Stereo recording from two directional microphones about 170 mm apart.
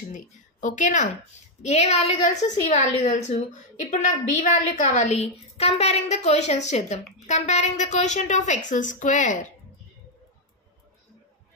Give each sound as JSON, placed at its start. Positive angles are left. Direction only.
{"t": 0.1, "sound": "a woman's voice", "side_deg": 50}